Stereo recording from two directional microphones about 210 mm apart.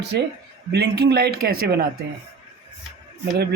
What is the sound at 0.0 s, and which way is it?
A man's voice, 50° right (ahead or behind).